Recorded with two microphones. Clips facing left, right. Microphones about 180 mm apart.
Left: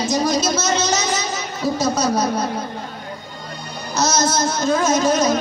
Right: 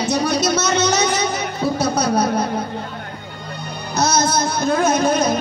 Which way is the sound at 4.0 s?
55° right (ahead or behind).